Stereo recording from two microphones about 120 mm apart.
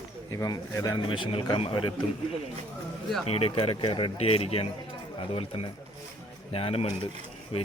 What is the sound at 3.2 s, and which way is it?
Speech, 55° left (ahead or behind).